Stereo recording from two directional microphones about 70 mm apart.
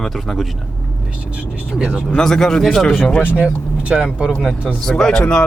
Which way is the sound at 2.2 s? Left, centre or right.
Centre.